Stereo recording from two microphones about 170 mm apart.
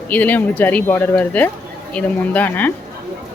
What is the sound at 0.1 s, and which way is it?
Speech, 10° left (ahead or behind).